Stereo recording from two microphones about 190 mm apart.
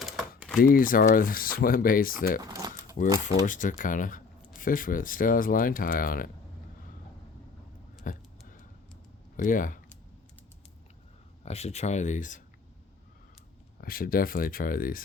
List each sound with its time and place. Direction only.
0.0 s typing: centre (ahead or behind)
0.6 s speech: 50° left (ahead or behind)
2.4 s a sound: 20° right (ahead or behind)
3.0 s speech: 40° left (ahead or behind)
8.0 s a sound: 45° left (ahead or behind)
9.4 s speech: 45° left (ahead or behind)
11.4 s speech: 35° left (ahead or behind)
13.8 s speech: 50° left (ahead or behind)